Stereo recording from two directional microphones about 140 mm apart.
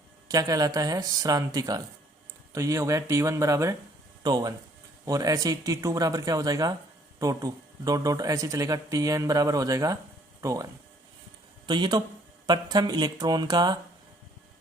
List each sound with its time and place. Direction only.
0.3 s speech: 25° right (ahead or behind)